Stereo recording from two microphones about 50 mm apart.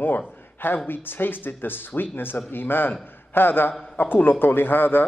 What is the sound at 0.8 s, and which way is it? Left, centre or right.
A man's voice, left.